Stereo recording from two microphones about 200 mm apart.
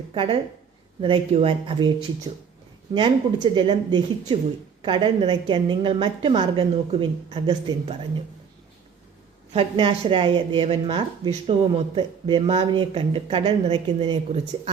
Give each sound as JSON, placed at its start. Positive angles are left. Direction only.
{"t": 0.1, "sound": "a woman's voice", "side_deg": -25}
{"t": 2.9, "sound": "a woman's voice", "side_deg": -20}
{"t": 9.5, "sound": "a woman's voice", "side_deg": -30}